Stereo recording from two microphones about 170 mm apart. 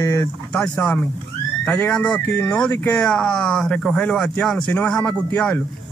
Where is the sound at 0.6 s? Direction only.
5° left (ahead or behind).